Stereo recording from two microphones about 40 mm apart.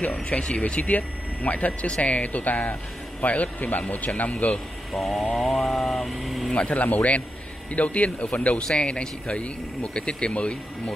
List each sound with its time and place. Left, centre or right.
0.1 s speech: left
4.9 s speech: centre
6.5 s speech: left